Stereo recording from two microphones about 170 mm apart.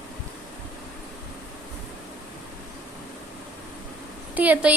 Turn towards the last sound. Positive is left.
turn(degrees=-10)  # may be behind; listen again after turning